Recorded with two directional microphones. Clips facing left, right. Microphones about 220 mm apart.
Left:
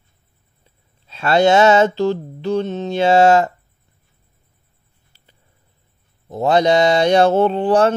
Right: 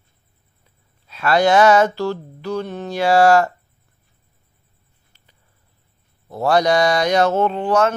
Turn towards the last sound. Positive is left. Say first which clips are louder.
# left 3 dB
turn(degrees=30)  # may be behind; listen again after turning